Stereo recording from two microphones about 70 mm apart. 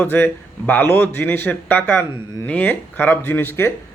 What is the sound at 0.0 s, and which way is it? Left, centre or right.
Speech, left.